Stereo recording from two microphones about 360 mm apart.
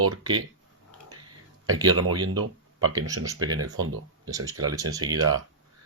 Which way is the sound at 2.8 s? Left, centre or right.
Right.